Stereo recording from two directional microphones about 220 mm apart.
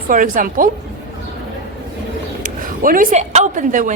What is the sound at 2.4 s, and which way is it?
Speech, 40° right (ahead or behind).